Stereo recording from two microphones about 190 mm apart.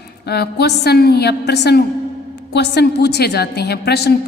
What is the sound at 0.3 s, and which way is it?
A woman's voice, 60° left (ahead or behind).